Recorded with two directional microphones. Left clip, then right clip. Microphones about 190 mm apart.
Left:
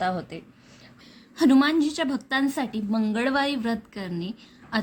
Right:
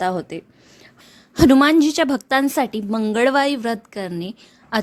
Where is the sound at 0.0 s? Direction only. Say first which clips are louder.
Right 5 dB; 40° right (ahead or behind).